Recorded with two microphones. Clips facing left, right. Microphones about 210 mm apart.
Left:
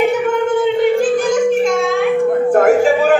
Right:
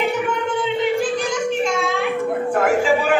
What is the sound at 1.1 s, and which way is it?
Music, 45° left (ahead or behind).